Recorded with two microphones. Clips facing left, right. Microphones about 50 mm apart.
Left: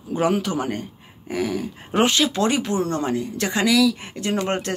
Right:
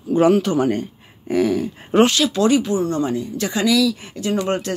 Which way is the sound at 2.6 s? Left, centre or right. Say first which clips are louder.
Right 3 dB; left.